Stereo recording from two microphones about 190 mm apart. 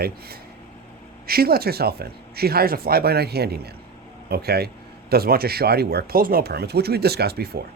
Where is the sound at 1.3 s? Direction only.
55° right (ahead or behind).